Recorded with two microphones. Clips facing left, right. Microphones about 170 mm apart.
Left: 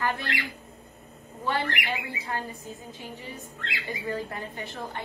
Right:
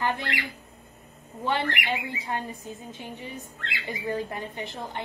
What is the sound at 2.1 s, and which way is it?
Speech, 20° right (ahead or behind).